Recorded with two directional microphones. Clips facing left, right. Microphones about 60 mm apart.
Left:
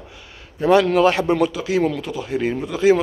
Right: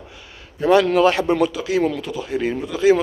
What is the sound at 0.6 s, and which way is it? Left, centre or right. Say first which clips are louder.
Speech: even; centre.